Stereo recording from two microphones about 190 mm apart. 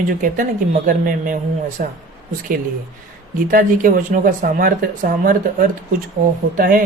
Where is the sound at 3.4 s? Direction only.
45° right (ahead or behind).